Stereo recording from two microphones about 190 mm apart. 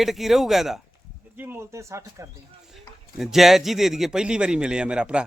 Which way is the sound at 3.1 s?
Centre (ahead or behind).